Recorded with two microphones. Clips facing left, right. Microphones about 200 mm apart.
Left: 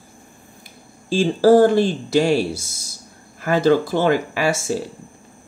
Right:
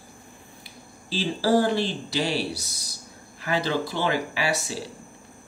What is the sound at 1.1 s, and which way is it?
Speech, 50° left (ahead or behind).